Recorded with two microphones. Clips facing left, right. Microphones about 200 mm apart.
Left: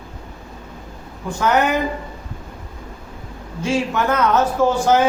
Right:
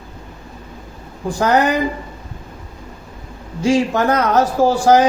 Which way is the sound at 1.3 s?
35° right (ahead or behind).